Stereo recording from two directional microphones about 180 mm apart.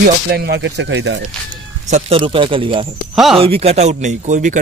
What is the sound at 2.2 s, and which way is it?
Speech, 30° right (ahead or behind).